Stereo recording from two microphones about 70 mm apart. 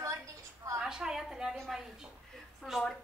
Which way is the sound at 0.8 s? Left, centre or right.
Centre.